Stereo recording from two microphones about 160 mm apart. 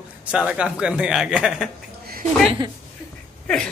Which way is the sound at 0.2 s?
5° right (ahead or behind).